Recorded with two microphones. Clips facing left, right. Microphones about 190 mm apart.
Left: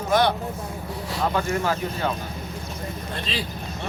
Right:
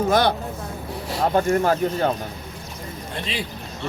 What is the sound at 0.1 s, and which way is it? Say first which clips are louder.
Speech: left 1 dB; 35° right (ahead or behind).